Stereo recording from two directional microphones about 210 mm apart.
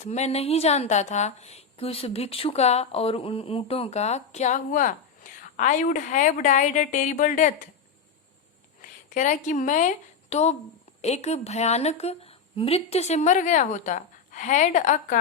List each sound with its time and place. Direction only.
0.0 s a woman's voice: 30° left (ahead or behind)
8.8 s a woman's voice: 35° left (ahead or behind)